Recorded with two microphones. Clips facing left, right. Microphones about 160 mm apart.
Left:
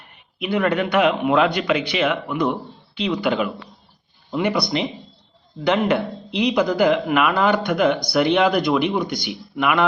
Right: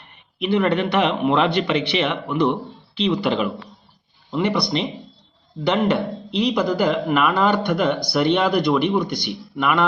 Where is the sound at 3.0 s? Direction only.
Centre (ahead or behind).